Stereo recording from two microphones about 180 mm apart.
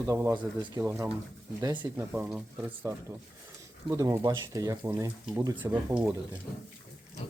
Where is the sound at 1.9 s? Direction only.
10° right (ahead or behind).